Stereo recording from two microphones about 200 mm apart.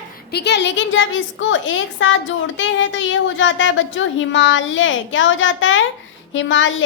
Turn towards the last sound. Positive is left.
turn(degrees=70)  # may be behind; listen again after turning